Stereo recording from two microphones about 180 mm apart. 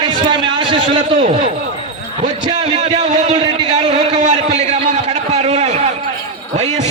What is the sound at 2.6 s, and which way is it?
Speech, 40° right (ahead or behind).